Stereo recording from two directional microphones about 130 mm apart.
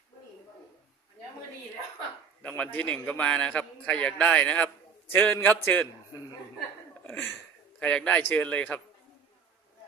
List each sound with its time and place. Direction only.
2.4 s a man's voice: 10° left (ahead or behind)
7.0 s a man's voice: 15° left (ahead or behind)